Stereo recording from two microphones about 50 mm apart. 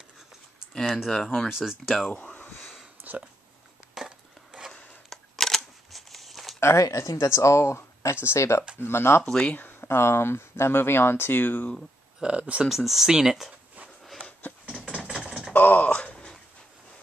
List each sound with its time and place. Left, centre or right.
1.1 s speech: centre
1.5 s speech: centre
2.6 s sniff: centre
3.9 s a sound: centre
5.1 s a sound: centre
6.6 s speech: left
8.7 s speech: left
12.2 s speech: right
12.6 s speech: centre
14.8 s a sound: right
15.1 s typing: centre
15.5 s a sound: left